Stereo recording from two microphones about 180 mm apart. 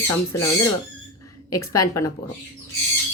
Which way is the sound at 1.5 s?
20° left (ahead or behind).